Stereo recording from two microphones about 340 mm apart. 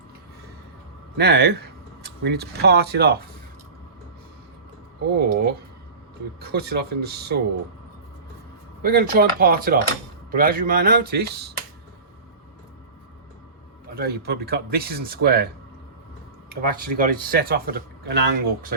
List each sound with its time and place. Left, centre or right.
1.1 s speech: right
5.1 s speech: right
8.8 s speech: right
13.8 s speech: right
16.5 s speech: right